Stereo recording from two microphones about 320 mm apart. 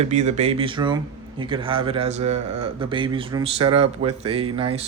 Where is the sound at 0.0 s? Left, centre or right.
Right.